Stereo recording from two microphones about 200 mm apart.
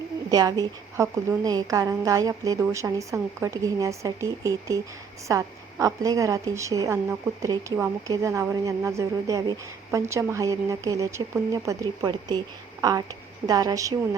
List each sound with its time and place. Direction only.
0.3 s a woman's voice: 20° right (ahead or behind)